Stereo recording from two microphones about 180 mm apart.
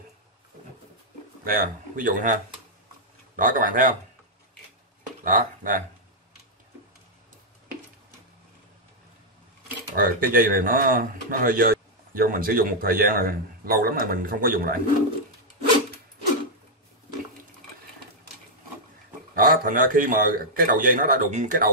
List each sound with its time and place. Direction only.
1.4 s speech: 50° right (ahead or behind)
3.3 s speech: 50° right (ahead or behind)
5.2 s speech: 50° right (ahead or behind)
9.9 s speech: 55° right (ahead or behind)
19.3 s speech: 50° right (ahead or behind)